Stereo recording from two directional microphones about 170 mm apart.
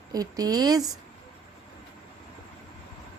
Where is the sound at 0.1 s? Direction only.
20° right (ahead or behind).